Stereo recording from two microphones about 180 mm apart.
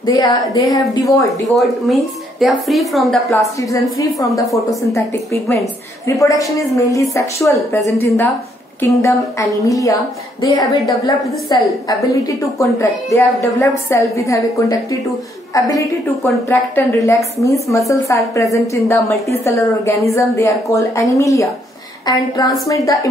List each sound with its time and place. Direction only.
0.0 s a woman's voice: 20° left (ahead or behind)
1.5 s speech: centre (ahead or behind)
4.6 s a woman's voice: 15° left (ahead or behind)